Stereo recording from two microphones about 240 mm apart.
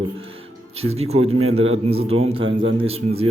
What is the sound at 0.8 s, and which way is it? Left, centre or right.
Speech, right.